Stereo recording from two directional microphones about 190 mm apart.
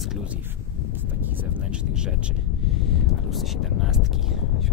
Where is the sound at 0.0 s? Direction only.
5° right (ahead or behind).